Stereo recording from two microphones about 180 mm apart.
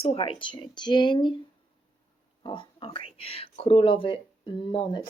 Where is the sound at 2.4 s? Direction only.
30° left (ahead or behind).